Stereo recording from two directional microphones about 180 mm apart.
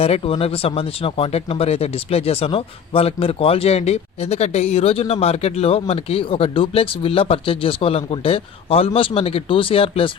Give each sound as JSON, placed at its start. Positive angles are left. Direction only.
{"t": 0.0, "sound": "speech", "side_deg": 35}